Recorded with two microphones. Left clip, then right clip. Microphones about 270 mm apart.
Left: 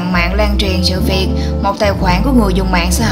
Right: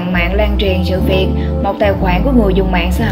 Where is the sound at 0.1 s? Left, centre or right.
Centre.